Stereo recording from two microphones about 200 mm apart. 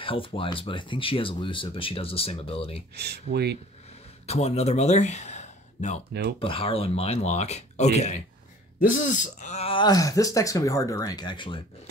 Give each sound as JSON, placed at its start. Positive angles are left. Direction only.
{"t": 0.0, "sound": "speech", "side_deg": 25}
{"t": 3.3, "sound": "speech", "side_deg": -70}
{"t": 4.3, "sound": "speech", "side_deg": 30}